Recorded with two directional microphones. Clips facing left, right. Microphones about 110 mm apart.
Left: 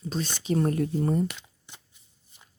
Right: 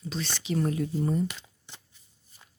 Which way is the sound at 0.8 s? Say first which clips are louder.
Left 2 dB; 55° left (ahead or behind).